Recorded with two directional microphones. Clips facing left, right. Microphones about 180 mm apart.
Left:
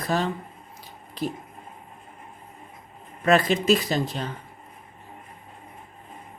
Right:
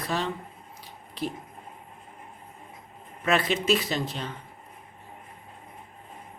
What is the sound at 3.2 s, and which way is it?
Speech, 40° left (ahead or behind).